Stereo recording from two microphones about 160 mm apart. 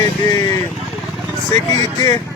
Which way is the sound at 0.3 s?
20° left (ahead or behind).